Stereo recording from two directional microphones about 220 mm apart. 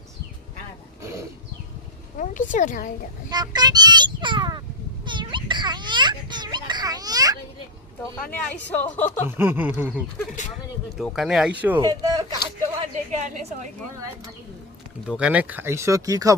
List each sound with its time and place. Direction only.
2.1 s speech: 35° left (ahead or behind)
3.2 s a child's voice: 20° right (ahead or behind)
5.0 s children playing: 20° right (ahead or behind)
8.1 s speech: 10° left (ahead or behind)
9.2 s speech: 10° right (ahead or behind)
11.8 s speech: 15° right (ahead or behind)
12.8 s a woman's voice: 30° right (ahead or behind)
15.0 s speech: 5° right (ahead or behind)